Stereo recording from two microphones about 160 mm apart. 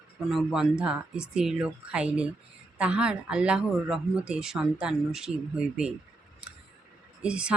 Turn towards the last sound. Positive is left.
turn(degrees=-5)  # may be behind; listen again after turning